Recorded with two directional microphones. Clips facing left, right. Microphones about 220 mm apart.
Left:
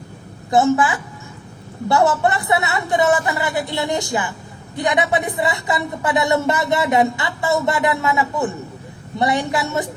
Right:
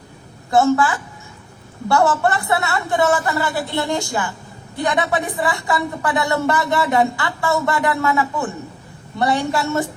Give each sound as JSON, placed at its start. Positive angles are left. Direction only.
{"t": 0.5, "sound": "speech", "side_deg": 20}